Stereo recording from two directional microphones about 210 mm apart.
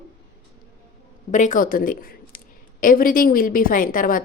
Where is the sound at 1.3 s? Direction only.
40° left (ahead or behind).